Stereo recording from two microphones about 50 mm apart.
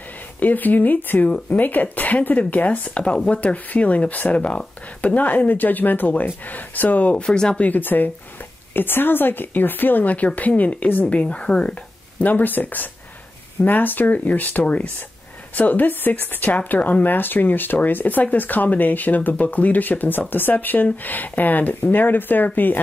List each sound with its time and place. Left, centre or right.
0.4 s speech: left
7.2 s speech: centre
7.6 s speech: left
11.1 s a woman's voice: left
12.2 s speech: left